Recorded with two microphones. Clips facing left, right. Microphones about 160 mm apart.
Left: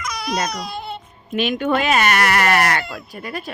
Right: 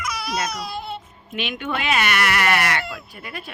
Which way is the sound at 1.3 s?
40° left (ahead or behind).